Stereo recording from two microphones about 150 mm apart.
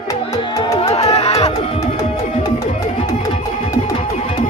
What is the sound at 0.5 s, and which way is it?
Music, 25° left (ahead or behind).